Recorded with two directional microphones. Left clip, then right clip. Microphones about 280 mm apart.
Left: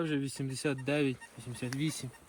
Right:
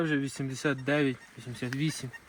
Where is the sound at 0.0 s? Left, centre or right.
Centre.